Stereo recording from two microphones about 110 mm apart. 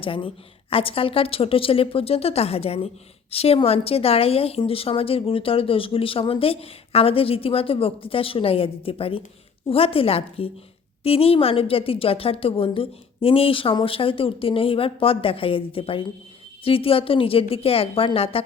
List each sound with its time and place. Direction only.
0.0 s a woman's voice: 55° left (ahead or behind)